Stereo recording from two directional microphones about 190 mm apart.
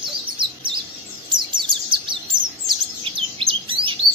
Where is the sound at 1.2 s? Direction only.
25° right (ahead or behind).